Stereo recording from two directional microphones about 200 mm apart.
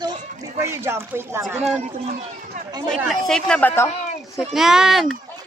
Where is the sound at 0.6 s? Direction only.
15° right (ahead or behind).